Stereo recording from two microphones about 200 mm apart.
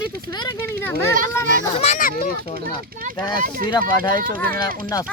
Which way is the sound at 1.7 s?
35° left (ahead or behind).